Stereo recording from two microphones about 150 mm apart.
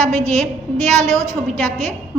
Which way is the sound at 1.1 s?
20° right (ahead or behind).